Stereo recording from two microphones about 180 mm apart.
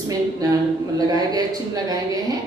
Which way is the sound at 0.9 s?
20° right (ahead or behind).